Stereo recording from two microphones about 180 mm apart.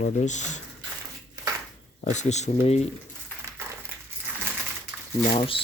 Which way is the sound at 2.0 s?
40° left (ahead or behind).